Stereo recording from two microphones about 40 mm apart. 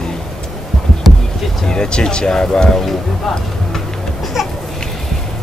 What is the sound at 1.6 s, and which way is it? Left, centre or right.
Speech, left.